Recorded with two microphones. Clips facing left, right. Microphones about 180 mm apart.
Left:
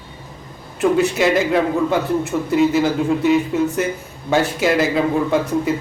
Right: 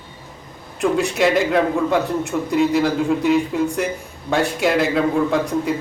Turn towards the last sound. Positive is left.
turn(degrees=0)  # may be behind; listen again after turning